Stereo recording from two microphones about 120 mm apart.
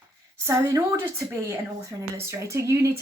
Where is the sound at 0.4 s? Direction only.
25° right (ahead or behind).